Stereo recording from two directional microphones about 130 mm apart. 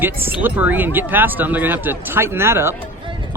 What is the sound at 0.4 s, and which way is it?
Speech, 10° right (ahead or behind).